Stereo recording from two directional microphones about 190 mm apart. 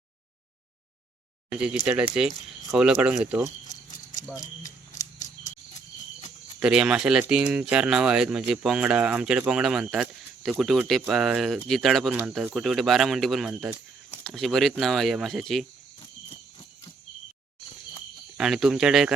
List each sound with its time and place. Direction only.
1.5 s speech: 5° right (ahead or behind)
4.6 s a sound: 20° left (ahead or behind)
6.6 s speech: 5° right (ahead or behind)
18.3 s speech: centre (ahead or behind)